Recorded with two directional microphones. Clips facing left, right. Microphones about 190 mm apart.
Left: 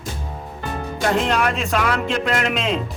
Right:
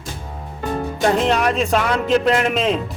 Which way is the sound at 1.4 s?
35° right (ahead or behind).